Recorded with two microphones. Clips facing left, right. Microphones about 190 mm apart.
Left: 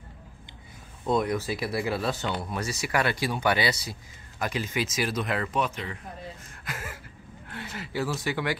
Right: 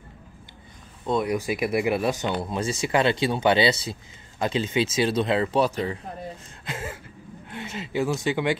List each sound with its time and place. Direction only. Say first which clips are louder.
1.2 s speech: right 4 dB; 15° right (ahead or behind); by 5.9 s 35° right (ahead or behind)
6.6 s a sound: right 5 dB; 25° right (ahead or behind)
7.4 s speech: right 4 dB; 20° right (ahead or behind)